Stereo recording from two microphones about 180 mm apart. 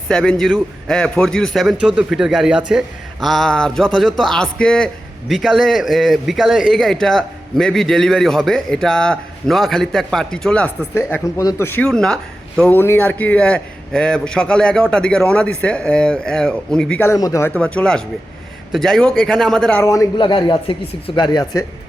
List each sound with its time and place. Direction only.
0.1 s a man's voice: 5° left (ahead or behind); by 17.5 s 20° left (ahead or behind)
17.5 s a man's voice: 5° left (ahead or behind)
19.8 s speech: 20° left (ahead or behind)